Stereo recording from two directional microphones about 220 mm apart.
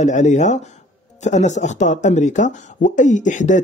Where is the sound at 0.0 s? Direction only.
35° left (ahead or behind).